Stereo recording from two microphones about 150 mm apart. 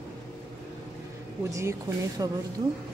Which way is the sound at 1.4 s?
20° right (ahead or behind).